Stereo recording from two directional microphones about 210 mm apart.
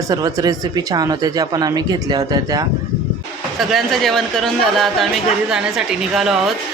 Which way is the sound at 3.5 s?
Centre (ahead or behind).